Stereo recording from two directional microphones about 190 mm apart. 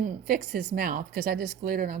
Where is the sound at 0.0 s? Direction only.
50° right (ahead or behind).